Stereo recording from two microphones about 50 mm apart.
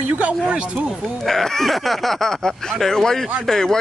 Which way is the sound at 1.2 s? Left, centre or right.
Centre.